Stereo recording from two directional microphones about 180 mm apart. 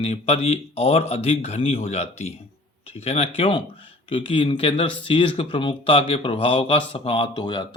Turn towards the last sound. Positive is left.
turn(degrees=25)  # may be behind; listen again after turning